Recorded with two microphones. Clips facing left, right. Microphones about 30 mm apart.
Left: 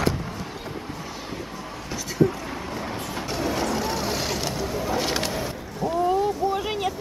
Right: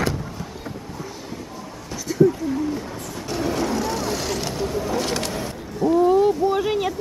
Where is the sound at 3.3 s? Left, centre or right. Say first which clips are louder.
Right 3 dB; centre.